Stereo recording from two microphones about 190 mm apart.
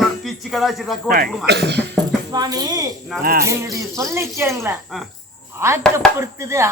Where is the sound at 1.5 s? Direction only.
65° right (ahead or behind).